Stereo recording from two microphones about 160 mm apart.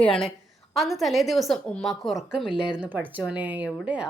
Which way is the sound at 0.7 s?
Centre (ahead or behind).